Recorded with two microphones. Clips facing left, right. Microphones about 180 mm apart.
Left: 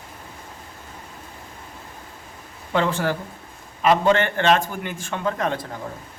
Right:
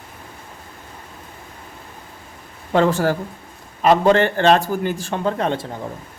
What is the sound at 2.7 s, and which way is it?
Speech, 40° right (ahead or behind).